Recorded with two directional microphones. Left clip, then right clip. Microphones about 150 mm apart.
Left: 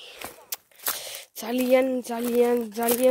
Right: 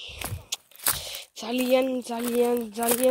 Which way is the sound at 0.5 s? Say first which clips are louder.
Right 7 dB; 35° left (ahead or behind).